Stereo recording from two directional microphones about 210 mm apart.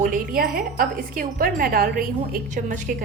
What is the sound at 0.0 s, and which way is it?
A woman's voice, 40° right (ahead or behind).